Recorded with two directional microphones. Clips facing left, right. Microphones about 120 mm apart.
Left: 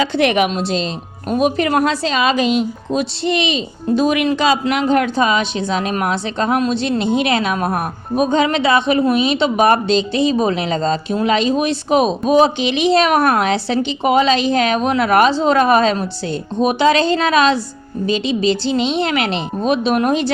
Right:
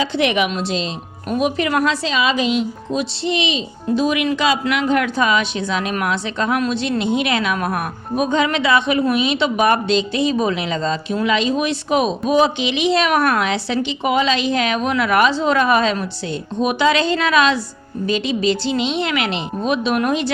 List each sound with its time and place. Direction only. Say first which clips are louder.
0.2 s a woman's voice: left 3 dB; 45° left (ahead or behind)
4.3 s speech: left 2 dB; 35° left (ahead or behind)